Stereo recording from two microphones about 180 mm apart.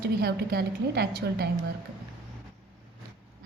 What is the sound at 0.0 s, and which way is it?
A woman's voice, 60° right (ahead or behind).